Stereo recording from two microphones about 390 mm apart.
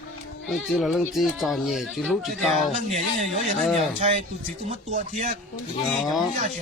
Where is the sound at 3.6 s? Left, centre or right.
Centre.